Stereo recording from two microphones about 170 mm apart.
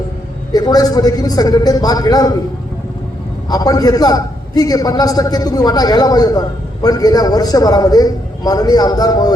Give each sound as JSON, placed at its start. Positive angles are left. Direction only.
{"t": 0.5, "sound": "a man's voice", "side_deg": 20}
{"t": 3.5, "sound": "a man's voice", "side_deg": 25}